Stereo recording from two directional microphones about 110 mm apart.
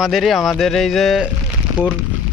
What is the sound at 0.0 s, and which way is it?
Speech, centre (ahead or behind).